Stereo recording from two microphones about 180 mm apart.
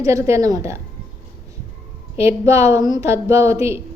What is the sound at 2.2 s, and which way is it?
A woman's voice, 15° right (ahead or behind).